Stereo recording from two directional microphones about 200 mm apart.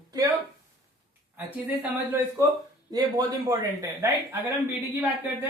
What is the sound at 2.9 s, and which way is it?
Speech, 20° right (ahead or behind).